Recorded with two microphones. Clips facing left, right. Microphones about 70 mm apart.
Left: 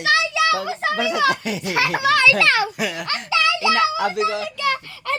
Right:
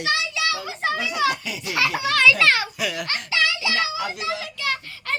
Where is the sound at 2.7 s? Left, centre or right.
Left.